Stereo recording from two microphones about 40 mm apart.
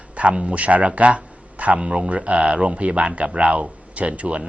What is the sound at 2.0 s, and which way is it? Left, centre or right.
Speech, right.